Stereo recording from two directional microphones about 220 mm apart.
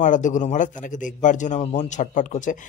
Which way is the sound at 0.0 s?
35° left (ahead or behind).